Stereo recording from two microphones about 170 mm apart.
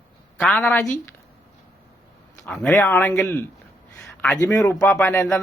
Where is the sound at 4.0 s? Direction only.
5° left (ahead or behind).